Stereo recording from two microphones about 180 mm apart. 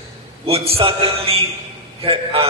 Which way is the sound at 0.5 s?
30° right (ahead or behind).